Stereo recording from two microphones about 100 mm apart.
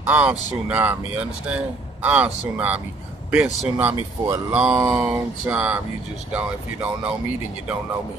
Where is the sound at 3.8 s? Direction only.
15° right (ahead or behind).